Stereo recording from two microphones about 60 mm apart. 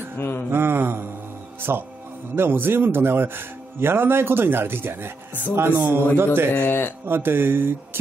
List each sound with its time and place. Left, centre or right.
0.2 s speech: left
0.5 s mantra: right
1.6 s speech: right
6.5 s speech: left
7.1 s speech: right